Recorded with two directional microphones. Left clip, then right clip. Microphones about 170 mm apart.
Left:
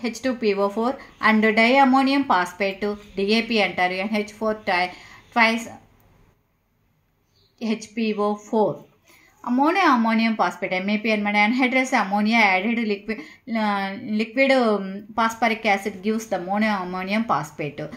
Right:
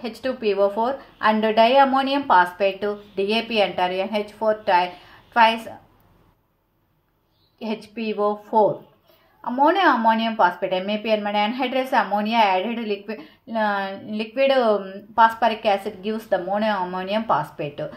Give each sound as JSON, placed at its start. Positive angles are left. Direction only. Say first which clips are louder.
{"t": 0.0, "sound": "speech", "louder": "left 1 dB", "side_deg": 30}
{"t": 7.5, "sound": "speech", "louder": "left 2 dB", "side_deg": 25}